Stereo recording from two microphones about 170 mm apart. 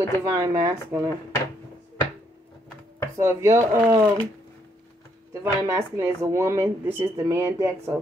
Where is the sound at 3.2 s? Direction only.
15° right (ahead or behind).